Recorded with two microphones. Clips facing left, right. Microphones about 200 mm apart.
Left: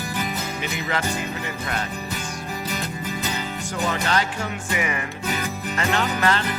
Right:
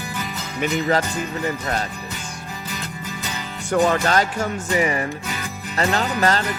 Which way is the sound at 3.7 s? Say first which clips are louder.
Right 7 dB; 50° right (ahead or behind).